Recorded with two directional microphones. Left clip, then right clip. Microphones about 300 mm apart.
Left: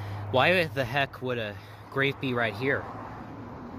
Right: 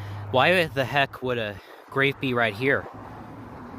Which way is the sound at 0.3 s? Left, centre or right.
Centre.